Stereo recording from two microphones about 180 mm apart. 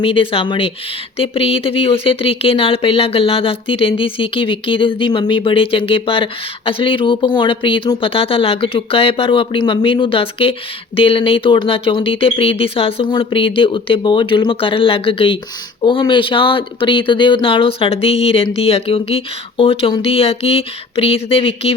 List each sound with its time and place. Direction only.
0.0 s speech: 30° left (ahead or behind)